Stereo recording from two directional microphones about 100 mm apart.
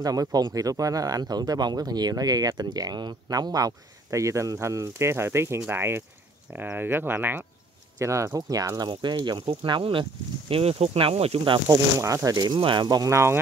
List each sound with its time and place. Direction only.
0.0 s speech: 40° right (ahead or behind); by 10.0 s 55° right (ahead or behind)
10.5 s speech: 85° right; by 11.6 s 65° right (ahead or behind)
11.7 s speech: 30° right (ahead or behind)
12.5 s speech: 55° right (ahead or behind)
13.1 s speech: 25° right (ahead or behind)